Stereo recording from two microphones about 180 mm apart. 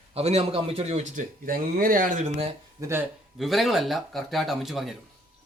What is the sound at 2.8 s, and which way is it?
Speech, 15° right (ahead or behind).